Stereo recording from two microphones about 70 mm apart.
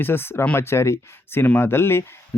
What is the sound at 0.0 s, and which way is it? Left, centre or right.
Speech, left.